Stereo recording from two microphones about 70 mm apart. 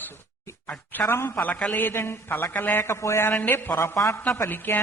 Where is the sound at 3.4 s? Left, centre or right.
Left.